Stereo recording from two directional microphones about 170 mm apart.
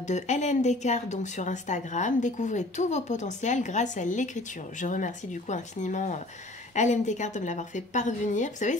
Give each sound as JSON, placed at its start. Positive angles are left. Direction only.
{"t": 0.0, "sound": "a woman's voice", "side_deg": 45}